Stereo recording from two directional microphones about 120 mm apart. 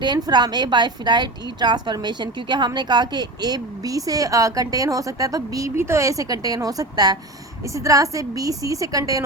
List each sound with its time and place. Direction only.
0.0 s a woman's voice: 35° right (ahead or behind)